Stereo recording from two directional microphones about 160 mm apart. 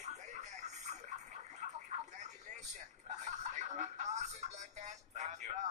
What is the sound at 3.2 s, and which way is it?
Music, 45° right (ahead or behind).